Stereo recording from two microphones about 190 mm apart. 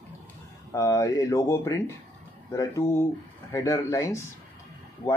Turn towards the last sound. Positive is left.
turn(degrees=10)  # may be behind; listen again after turning